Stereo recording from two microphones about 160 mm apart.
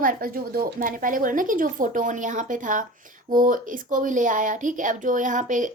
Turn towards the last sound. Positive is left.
turn(degrees=-55)  # may be behind; listen again after turning